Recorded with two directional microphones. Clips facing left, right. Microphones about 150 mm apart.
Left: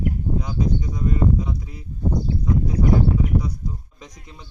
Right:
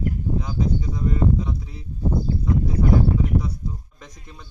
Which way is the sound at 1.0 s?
10° left (ahead or behind).